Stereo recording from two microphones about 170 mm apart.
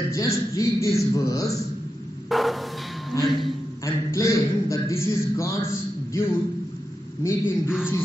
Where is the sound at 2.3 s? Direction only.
Centre (ahead or behind).